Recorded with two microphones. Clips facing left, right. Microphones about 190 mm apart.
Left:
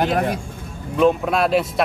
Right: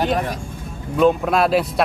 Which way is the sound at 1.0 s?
Centre (ahead or behind).